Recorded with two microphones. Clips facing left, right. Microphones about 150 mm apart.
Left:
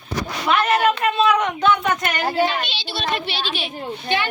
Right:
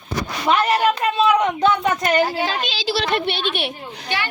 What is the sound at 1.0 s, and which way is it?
Speech, 30° right (ahead or behind).